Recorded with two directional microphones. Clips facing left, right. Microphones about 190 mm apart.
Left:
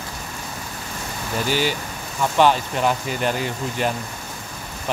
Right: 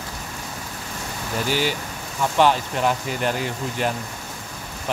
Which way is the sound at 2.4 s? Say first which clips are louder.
Left 1 dB; 20° left (ahead or behind).